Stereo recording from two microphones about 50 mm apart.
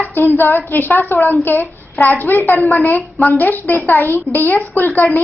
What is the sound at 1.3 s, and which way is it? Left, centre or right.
A woman's voice, left.